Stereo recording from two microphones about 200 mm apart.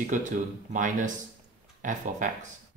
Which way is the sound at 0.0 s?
40° right (ahead or behind).